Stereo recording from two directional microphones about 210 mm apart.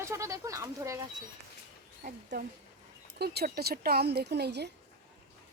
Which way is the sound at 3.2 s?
50° right (ahead or behind).